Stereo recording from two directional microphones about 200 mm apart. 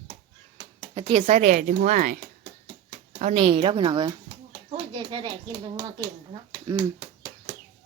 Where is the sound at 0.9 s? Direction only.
25° right (ahead or behind); by 2.1 s 40° right (ahead or behind).